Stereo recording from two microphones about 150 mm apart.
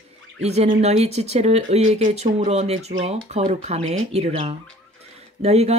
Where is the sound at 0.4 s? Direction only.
45° right (ahead or behind).